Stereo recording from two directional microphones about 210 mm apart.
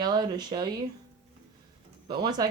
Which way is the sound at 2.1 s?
20° right (ahead or behind).